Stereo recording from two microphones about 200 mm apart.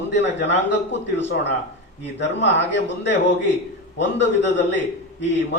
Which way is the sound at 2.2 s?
60° left (ahead or behind).